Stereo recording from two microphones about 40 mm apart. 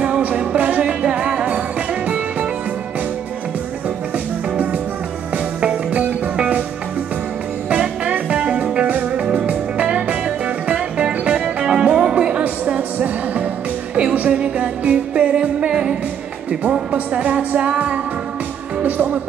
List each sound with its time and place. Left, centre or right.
0.6 s music: right
5.9 s music: right
6.3 s music: right
7.7 s music: right
13.0 s music: right
17.1 s music: right
18.8 s music: right